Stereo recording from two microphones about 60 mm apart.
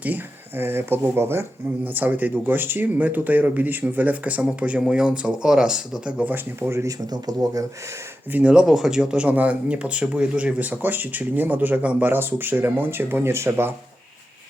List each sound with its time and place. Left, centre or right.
0.5 s speech: right
1.8 s speech: right
4.8 s speech: centre
6.3 s speech: right
6.8 s speech: right
8.3 s speech: right
8.7 s speech: centre; by 13.7 s right